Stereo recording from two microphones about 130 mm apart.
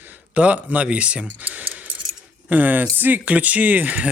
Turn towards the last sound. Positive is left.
turn(degrees=-10)  # may be behind; listen again after turning